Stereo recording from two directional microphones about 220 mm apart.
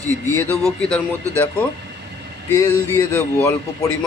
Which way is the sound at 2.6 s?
10° left (ahead or behind).